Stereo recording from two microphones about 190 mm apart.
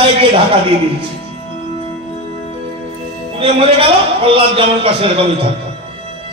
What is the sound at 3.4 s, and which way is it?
A man's voice, 30° right (ahead or behind).